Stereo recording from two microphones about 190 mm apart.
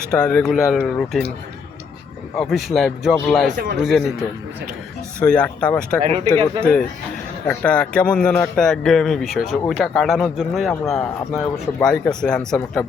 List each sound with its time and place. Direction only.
0.2 s speech: 10° left (ahead or behind)
2.3 s speech: centre (ahead or behind)
6.0 s speech: 35° right (ahead or behind)
6.6 s speech: 5° left (ahead or behind)